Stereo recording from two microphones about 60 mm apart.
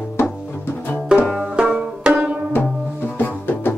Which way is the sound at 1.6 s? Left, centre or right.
Centre.